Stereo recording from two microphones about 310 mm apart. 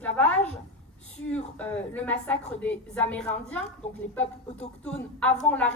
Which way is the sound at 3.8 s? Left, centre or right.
Left.